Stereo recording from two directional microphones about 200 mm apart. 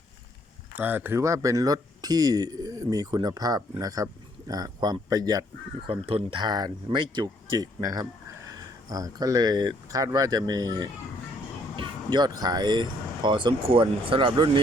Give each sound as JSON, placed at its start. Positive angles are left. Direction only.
{"t": 0.8, "sound": "speech", "side_deg": -10}